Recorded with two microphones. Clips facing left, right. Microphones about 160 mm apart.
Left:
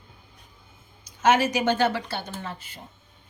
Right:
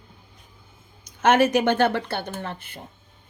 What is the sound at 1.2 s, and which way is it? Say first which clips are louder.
Speech: right 3 dB; 55° right (ahead or behind).